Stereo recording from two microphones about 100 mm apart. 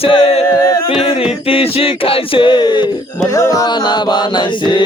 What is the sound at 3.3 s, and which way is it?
Music, 35° left (ahead or behind).